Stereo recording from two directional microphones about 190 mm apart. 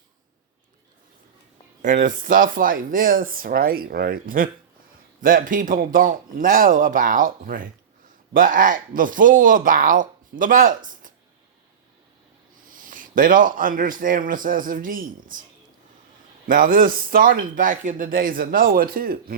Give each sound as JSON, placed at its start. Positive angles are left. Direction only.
{"t": 1.8, "sound": "speech", "side_deg": -45}
{"t": 12.6, "sound": "speech", "side_deg": -45}
{"t": 16.5, "sound": "speech", "side_deg": -45}